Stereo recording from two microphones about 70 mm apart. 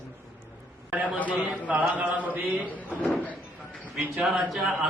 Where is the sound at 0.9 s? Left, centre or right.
Right.